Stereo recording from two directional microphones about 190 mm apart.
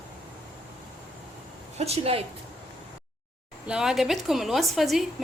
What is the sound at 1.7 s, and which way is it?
Speech, 35° right (ahead or behind).